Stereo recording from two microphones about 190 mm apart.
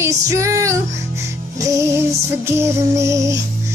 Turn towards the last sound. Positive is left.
turn(degrees=-15)  # may be behind; listen again after turning